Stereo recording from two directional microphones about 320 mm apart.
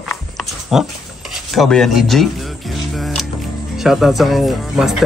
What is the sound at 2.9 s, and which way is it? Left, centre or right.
Music, centre.